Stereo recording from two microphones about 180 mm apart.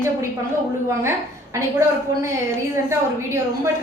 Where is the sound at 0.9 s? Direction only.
15° right (ahead or behind).